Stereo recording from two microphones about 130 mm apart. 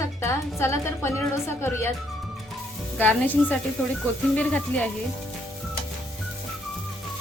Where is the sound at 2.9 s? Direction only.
15° left (ahead or behind).